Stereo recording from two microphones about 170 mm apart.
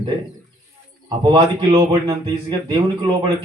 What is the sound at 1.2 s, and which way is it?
Speech, 25° right (ahead or behind).